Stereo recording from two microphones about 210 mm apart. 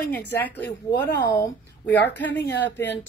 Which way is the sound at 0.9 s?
55° left (ahead or behind).